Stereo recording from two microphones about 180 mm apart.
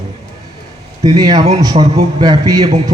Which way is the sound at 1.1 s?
20° right (ahead or behind).